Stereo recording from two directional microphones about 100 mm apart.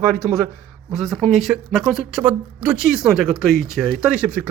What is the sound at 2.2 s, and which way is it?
Speech, 15° right (ahead or behind).